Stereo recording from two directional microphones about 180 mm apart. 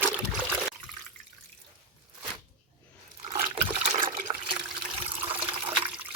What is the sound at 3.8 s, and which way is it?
Toilet flush, 40° right (ahead or behind).